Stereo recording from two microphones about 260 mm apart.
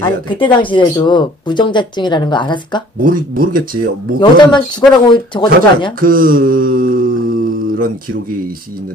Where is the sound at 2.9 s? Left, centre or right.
Right.